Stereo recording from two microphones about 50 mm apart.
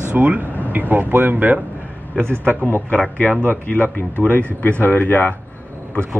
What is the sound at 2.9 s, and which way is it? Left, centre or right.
Speech, left.